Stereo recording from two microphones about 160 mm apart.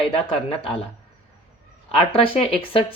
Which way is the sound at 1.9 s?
35° left (ahead or behind).